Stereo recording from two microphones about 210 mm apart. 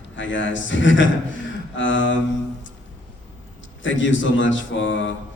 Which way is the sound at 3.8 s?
65° left (ahead or behind).